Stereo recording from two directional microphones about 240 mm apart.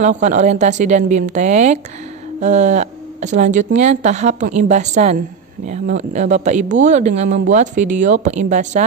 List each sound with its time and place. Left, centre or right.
0.0 s speech: right